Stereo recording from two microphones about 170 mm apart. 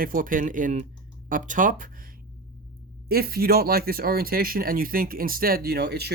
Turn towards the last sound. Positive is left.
turn(degrees=-70)  # may be behind; listen again after turning